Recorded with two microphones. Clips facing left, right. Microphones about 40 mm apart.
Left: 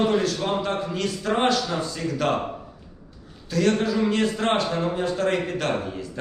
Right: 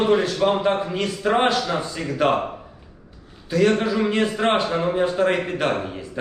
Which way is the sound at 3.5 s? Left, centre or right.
Centre.